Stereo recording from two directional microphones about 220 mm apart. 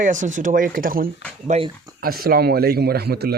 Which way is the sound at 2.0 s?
40° right (ahead or behind).